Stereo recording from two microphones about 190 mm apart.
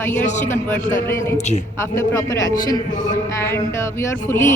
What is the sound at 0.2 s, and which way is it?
Speech, 40° left (ahead or behind).